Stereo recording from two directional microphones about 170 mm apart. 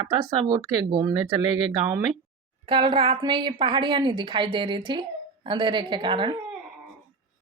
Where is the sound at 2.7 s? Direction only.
30° right (ahead or behind).